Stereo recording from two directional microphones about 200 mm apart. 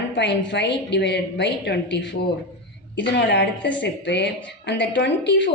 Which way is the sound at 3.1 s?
60° left (ahead or behind).